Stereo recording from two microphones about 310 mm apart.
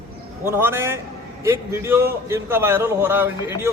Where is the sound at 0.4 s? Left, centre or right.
Centre.